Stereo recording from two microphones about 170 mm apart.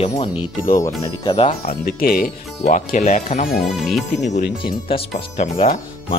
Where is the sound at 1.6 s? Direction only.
60° left (ahead or behind).